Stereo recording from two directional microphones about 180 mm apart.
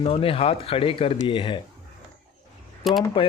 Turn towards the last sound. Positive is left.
turn(degrees=0)  # may be behind; listen again after turning